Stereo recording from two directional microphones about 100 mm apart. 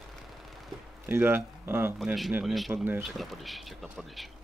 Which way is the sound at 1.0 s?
20° right (ahead or behind).